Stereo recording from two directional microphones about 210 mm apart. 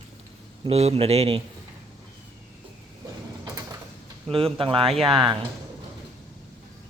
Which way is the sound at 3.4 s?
15° right (ahead or behind).